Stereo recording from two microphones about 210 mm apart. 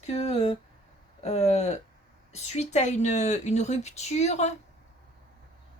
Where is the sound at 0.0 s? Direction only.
30° left (ahead or behind).